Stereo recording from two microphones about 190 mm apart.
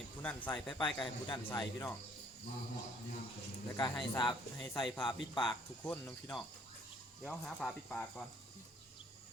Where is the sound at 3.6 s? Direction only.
20° left (ahead or behind).